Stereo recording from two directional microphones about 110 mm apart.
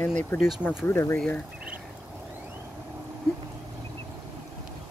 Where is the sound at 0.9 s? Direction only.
25° left (ahead or behind).